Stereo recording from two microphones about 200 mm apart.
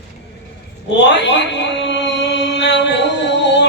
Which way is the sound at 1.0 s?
60° left (ahead or behind).